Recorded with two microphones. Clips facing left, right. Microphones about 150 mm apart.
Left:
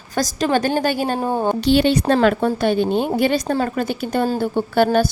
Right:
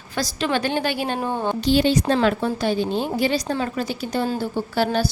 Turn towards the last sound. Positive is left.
turn(degrees=50)  # may be behind; listen again after turning